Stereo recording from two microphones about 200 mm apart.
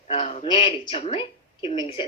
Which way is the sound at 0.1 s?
30° left (ahead or behind).